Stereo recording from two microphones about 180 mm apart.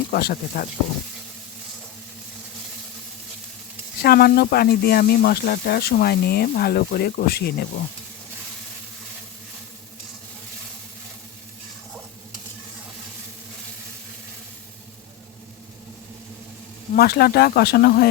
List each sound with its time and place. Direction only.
0.1 s speech: 60° left (ahead or behind)
4.0 s speech: 55° left (ahead or behind)
16.9 s speech: 60° left (ahead or behind)